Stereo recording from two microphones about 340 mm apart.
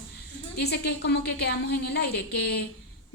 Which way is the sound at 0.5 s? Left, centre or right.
Left.